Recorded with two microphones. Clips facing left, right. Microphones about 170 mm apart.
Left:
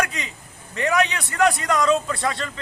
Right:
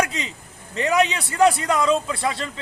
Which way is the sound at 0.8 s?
15° right (ahead or behind).